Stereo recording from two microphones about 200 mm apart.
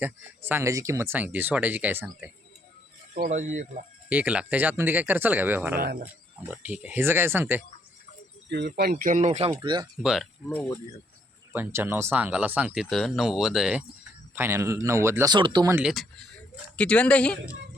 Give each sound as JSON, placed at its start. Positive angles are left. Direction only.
{"t": 0.0, "sound": "speech", "side_deg": -10}
{"t": 3.2, "sound": "speech", "side_deg": -40}
{"t": 4.1, "sound": "speech", "side_deg": -5}
{"t": 5.8, "sound": "speech", "side_deg": -45}
{"t": 6.5, "sound": "speech", "side_deg": -5}
{"t": 8.4, "sound": "speech", "side_deg": -60}
{"t": 9.5, "sound": "speech", "side_deg": -20}
{"t": 10.0, "sound": "speech", "side_deg": 0}
{"t": 10.5, "sound": "speech", "side_deg": 10}
{"t": 11.5, "sound": "speech", "side_deg": -10}
{"t": 15.7, "sound": "speech", "side_deg": -5}